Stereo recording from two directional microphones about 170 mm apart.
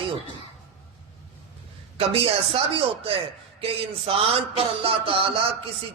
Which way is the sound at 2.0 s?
35° right (ahead or behind).